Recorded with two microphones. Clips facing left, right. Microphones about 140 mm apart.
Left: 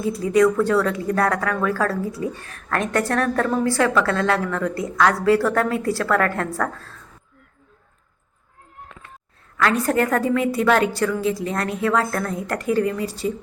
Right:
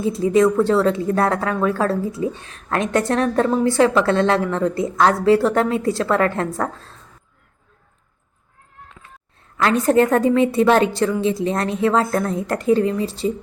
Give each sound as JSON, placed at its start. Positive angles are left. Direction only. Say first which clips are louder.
{"t": 0.0, "sound": "a woman's voice", "louder": "right 2 dB", "side_deg": -25}
{"t": 9.8, "sound": "a woman's voice", "louder": "right 5 dB", "side_deg": -25}